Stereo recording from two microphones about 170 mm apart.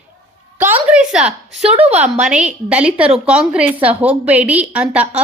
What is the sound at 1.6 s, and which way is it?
Speech, 35° right (ahead or behind).